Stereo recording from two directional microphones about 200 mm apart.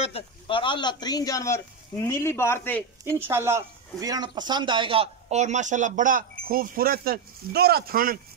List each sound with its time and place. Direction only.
0.0 s a man's voice: 30° left (ahead or behind); by 2.8 s 10° left (ahead or behind)
3.0 s speech: 15° right (ahead or behind); by 8.2 s 45° right (ahead or behind)